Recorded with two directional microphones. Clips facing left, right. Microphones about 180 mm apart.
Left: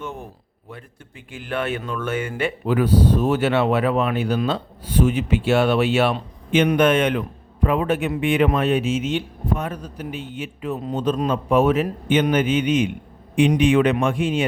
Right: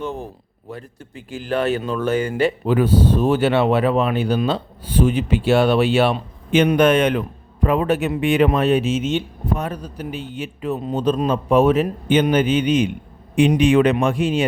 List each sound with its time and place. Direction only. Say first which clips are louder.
0.0 s a man's voice: right 5 dB; 35° right (ahead or behind)